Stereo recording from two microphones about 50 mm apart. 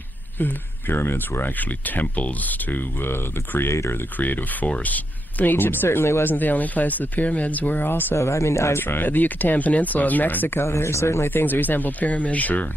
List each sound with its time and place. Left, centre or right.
0.4 s speech: left
4.2 s speech: left
6.2 s speech: left
8.2 s speech: left
8.8 s speech: left
10.6 s speech: left
11.2 s speech: left